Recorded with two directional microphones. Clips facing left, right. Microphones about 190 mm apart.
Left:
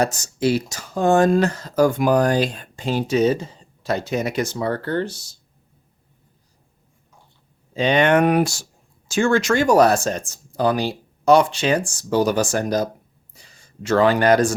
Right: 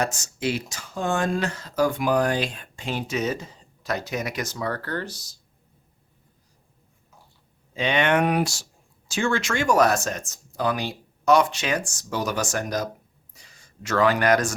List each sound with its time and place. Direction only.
0.0 s speech: 35° left (ahead or behind)
7.7 s speech: 35° left (ahead or behind)